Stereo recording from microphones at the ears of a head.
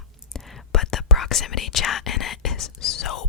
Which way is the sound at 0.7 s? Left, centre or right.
Left.